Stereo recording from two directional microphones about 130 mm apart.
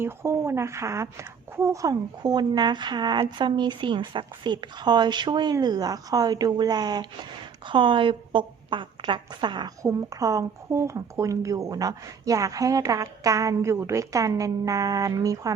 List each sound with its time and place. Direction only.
0.0 s a woman's voice: 20° right (ahead or behind); by 9.6 s 35° right (ahead or behind)
9.8 s a woman's voice: 25° right (ahead or behind)